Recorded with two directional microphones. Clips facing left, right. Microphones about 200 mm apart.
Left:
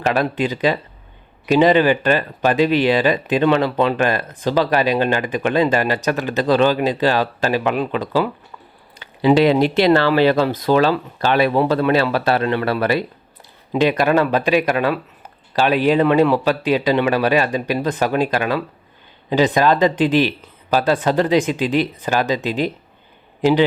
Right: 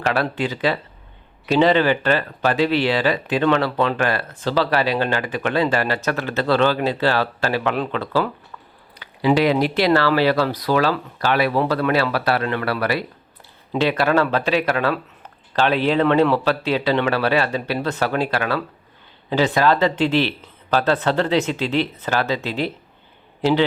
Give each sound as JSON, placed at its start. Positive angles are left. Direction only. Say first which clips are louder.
{"t": 0.0, "sound": "speech", "louder": "left 3 dB", "side_deg": 15}
{"t": 9.0, "sound": "a man's voice", "louder": "left 4 dB", "side_deg": 25}